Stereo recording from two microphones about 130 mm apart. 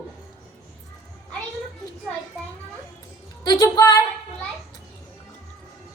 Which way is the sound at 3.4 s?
30° left (ahead or behind).